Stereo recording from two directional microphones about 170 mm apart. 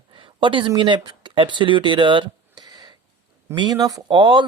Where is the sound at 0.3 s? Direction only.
30° right (ahead or behind).